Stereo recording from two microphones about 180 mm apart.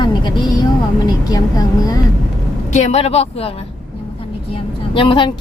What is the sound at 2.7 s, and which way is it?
Speech, 35° left (ahead or behind).